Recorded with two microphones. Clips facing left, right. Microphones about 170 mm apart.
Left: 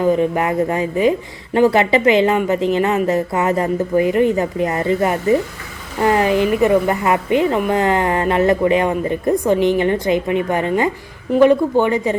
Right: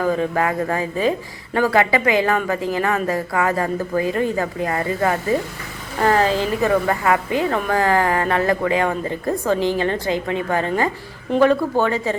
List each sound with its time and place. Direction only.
0.0 s a woman's voice: 20° left (ahead or behind)